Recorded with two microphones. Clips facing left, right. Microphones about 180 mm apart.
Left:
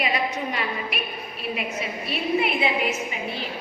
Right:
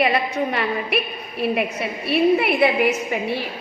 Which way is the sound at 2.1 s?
65° right (ahead or behind).